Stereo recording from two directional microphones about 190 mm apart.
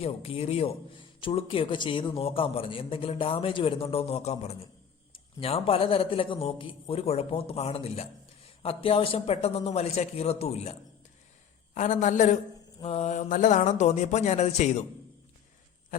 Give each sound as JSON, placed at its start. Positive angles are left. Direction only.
{"t": 0.0, "sound": "a man's voice", "side_deg": 30}